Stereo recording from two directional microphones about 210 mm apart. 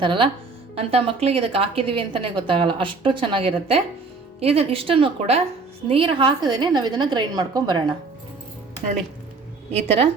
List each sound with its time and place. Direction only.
0.0 s a woman's voice: 25° right (ahead or behind)
9.7 s a woman's voice: 30° right (ahead or behind)